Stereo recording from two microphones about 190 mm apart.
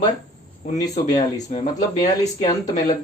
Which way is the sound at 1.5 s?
35° left (ahead or behind).